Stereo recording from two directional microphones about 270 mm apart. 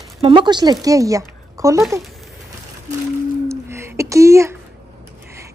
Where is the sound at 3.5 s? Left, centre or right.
Centre.